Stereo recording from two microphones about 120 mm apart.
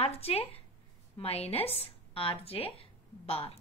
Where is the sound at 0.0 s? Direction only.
60° left (ahead or behind).